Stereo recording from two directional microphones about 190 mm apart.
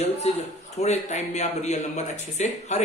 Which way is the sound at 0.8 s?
35° left (ahead or behind).